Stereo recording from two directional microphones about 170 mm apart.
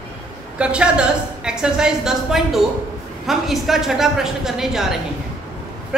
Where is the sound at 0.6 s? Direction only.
5° right (ahead or behind).